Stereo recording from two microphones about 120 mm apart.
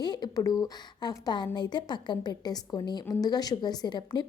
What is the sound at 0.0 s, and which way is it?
A woman's voice, 35° left (ahead or behind).